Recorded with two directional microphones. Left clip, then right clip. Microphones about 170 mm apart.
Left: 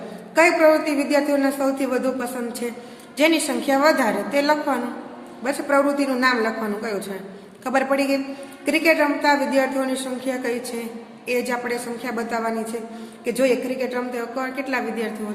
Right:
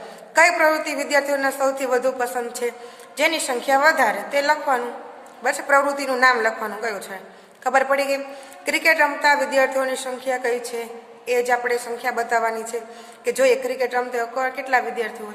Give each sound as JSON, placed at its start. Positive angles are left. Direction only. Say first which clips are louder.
{"t": 0.3, "sound": "a woman's voice", "louder": "left 1 dB", "side_deg": -45}